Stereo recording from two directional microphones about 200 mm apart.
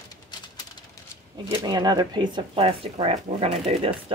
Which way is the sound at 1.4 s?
20° right (ahead or behind).